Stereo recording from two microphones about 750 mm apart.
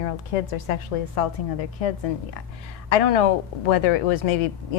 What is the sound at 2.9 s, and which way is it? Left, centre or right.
Speech, left.